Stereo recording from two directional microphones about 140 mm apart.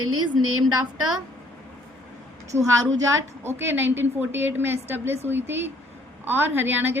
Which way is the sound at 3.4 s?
15° right (ahead or behind).